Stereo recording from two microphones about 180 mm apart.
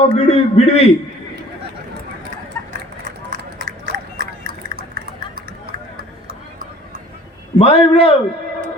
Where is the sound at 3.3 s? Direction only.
50° right (ahead or behind).